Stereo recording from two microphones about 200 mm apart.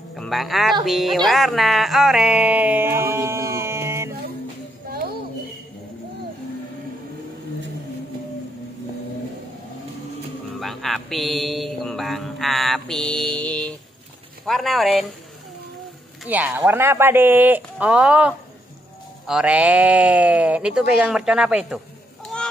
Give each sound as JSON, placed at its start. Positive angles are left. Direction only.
{"t": 0.1, "sound": "a woman's voice", "side_deg": 0}
{"t": 4.8, "sound": "a sound", "side_deg": -50}
{"t": 10.6, "sound": "mantra", "side_deg": 0}
{"t": 14.4, "sound": "speech", "side_deg": 0}
{"t": 16.3, "sound": "speech", "side_deg": -10}